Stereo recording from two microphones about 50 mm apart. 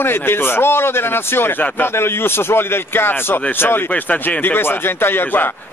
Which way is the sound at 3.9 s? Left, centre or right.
Left.